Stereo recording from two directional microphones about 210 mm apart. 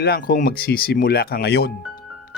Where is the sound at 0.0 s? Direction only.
45° left (ahead or behind).